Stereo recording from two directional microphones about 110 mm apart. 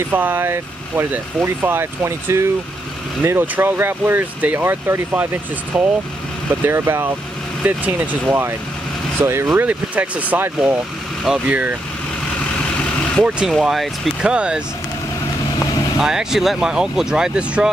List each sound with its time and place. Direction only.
0.1 s speech: 15° right (ahead or behind)
13.5 s speech: centre (ahead or behind)
16.0 s speech: 5° right (ahead or behind)